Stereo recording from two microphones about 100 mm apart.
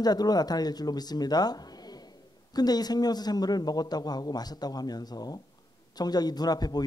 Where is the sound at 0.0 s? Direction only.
40° left (ahead or behind).